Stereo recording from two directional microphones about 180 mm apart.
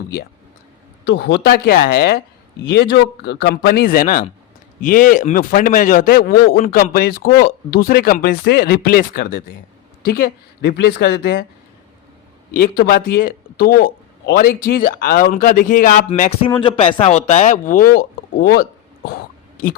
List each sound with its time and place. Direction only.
1.0 s speech: 65° left (ahead or behind)
12.5 s speech: 55° left (ahead or behind)
16.5 s speech: 30° left (ahead or behind); by 19.2 s 55° left (ahead or behind)